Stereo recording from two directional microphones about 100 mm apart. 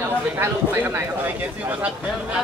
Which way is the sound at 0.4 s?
25° right (ahead or behind).